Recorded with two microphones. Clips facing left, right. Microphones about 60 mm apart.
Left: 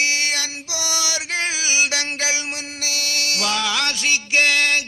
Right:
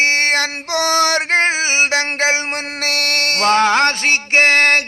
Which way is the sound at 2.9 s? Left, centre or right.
Right.